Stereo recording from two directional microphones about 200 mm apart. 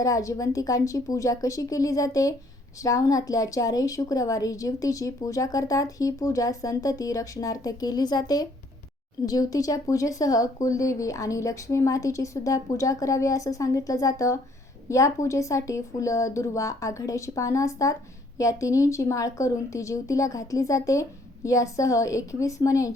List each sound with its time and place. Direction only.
0.0 s a woman's voice: 15° left (ahead or behind)